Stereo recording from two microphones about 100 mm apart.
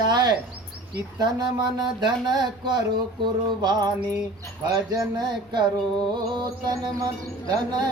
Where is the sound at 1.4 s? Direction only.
45° right (ahead or behind).